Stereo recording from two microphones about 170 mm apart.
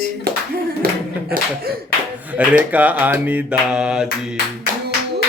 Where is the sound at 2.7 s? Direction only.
10° right (ahead or behind).